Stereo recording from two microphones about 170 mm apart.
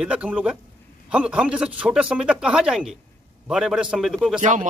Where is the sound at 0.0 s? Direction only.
5° right (ahead or behind).